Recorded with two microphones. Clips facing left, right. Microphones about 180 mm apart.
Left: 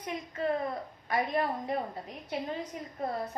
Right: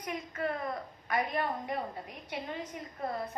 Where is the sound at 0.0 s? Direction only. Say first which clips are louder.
Left 2 dB; 25° left (ahead or behind).